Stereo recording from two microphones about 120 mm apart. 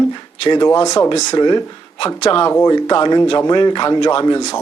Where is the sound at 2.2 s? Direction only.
50° left (ahead or behind).